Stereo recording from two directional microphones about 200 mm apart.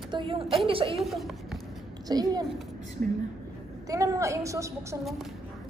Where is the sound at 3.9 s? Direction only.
15° right (ahead or behind).